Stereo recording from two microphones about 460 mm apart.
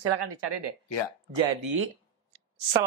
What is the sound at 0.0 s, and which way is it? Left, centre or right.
Speech, right.